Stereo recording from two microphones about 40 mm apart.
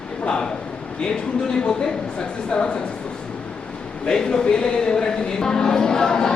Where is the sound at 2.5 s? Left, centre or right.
Left.